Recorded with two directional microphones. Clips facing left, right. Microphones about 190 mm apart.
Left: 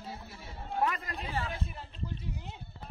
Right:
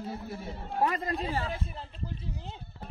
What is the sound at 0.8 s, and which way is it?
Speech, 30° right (ahead or behind).